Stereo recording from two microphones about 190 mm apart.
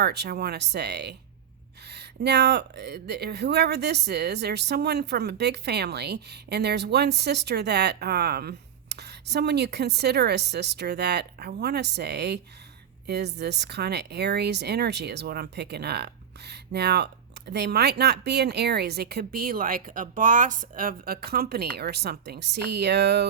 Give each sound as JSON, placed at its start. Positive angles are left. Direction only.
{"t": 0.0, "sound": "speech", "side_deg": -60}